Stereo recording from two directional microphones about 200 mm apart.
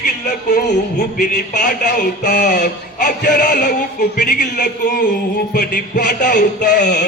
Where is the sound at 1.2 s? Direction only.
40° left (ahead or behind).